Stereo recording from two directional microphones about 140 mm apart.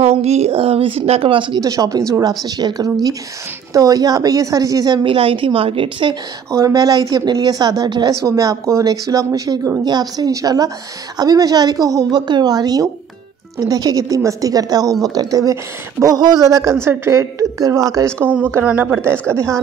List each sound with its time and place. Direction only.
0.0 s speech: 45° right (ahead or behind)
6.5 s a woman's voice: 25° right (ahead or behind)